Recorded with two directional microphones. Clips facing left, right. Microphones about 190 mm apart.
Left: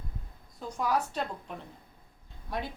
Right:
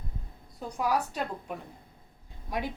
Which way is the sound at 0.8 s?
10° right (ahead or behind).